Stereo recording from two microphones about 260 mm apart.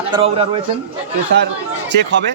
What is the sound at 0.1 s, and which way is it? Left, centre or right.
Speech, right.